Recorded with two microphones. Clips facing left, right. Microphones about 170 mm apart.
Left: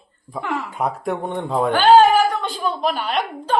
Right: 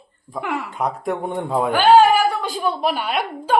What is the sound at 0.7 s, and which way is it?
A man's voice, centre (ahead or behind).